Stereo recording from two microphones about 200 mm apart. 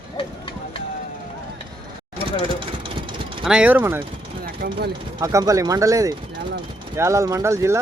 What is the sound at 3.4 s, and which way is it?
Speech, 5° right (ahead or behind).